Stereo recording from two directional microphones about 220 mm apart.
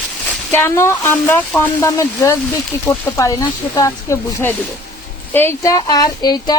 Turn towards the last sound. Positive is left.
turn(degrees=20)  # may be behind; listen again after turning